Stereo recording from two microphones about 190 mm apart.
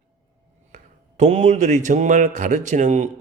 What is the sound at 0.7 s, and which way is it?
A man's voice, 40° right (ahead or behind).